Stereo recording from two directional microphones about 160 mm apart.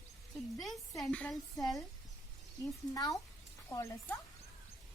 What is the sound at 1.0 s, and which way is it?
Speech, 5° left (ahead or behind).